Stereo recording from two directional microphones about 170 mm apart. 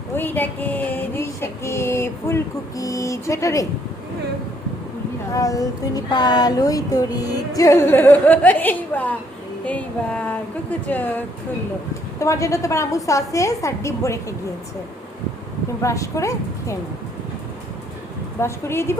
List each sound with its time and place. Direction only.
0.1 s female singing: 10° left (ahead or behind)
5.3 s a woman's voice: 20° left (ahead or behind)
7.3 s female singing: 20° left (ahead or behind)
12.2 s a woman's voice: 20° left (ahead or behind)
15.8 s female singing: 20° left (ahead or behind)
18.3 s female singing: 15° left (ahead or behind)